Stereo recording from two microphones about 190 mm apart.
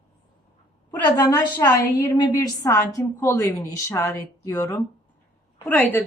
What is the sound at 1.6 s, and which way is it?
A woman's voice, 15° left (ahead or behind).